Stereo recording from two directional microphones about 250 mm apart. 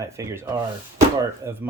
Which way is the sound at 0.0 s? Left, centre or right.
Centre.